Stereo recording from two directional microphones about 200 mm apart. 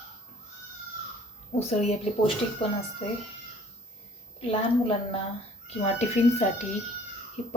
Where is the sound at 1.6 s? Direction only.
30° left (ahead or behind).